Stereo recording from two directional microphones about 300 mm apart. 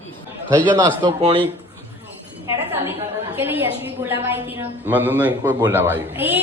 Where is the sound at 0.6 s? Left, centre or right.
Centre.